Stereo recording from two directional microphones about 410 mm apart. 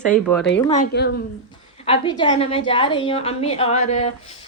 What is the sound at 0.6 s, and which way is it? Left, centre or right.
Speech, centre.